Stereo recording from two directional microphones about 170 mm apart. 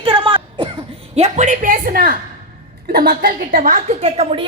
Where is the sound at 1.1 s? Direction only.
40° right (ahead or behind).